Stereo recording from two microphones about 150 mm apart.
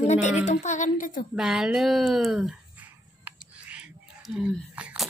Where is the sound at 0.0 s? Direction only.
50° left (ahead or behind).